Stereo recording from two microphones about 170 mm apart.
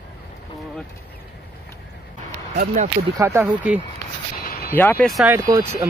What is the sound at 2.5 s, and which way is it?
Speech, 50° right (ahead or behind).